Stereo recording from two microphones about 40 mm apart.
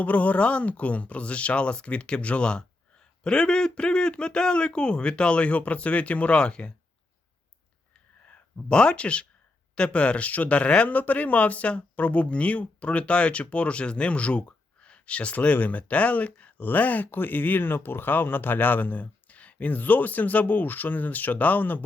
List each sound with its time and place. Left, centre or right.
0.0 s speech: left
8.7 s speech: left
10.2 s speech: left
10.8 s speech: left
16.6 s speech: left
19.3 s speech: left